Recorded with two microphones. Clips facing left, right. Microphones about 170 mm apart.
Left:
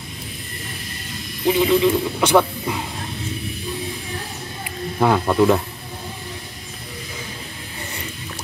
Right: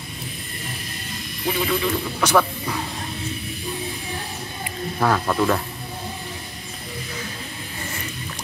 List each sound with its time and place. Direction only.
1.4 s speech: 20° left (ahead or behind)
5.0 s speech: 15° left (ahead or behind)